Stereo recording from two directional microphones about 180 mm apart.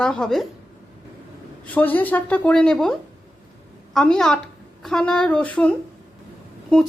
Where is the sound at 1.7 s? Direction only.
10° left (ahead or behind).